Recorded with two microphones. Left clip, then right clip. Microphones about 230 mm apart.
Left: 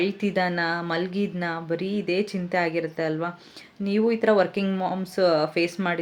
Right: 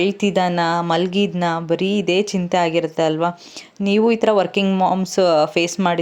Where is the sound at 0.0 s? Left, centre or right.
Right.